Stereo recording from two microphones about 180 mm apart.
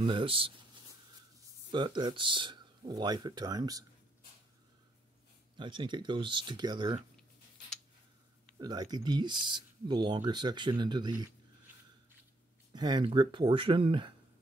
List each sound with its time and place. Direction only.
0.0 s speech: 30° right (ahead or behind)
1.7 s speech: 25° right (ahead or behind)
5.6 s speech: 25° right (ahead or behind)
8.5 s speech: 20° right (ahead or behind)
12.7 s speech: 25° right (ahead or behind)